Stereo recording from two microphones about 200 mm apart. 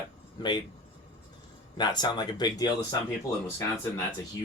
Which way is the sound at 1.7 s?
20° left (ahead or behind).